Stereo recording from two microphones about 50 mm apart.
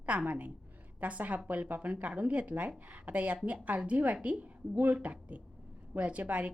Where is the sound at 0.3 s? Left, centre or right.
Right.